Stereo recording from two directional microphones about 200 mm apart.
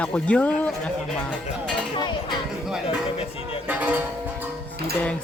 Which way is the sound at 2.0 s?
20° left (ahead or behind).